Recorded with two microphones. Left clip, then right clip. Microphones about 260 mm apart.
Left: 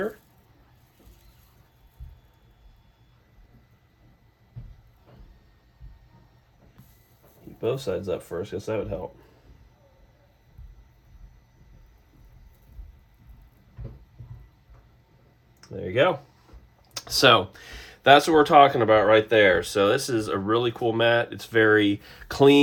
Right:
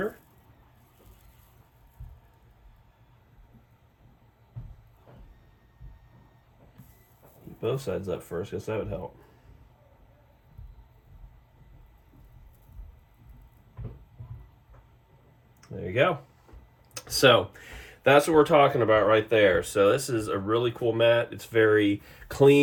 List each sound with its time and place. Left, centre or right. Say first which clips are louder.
7.6 s speech: left 3 dB; centre
15.7 s a sound: left 3 dB; centre
16.9 s speech: left 2 dB; centre